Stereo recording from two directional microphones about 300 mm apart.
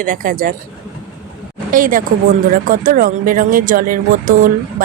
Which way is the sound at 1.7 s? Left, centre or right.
Right.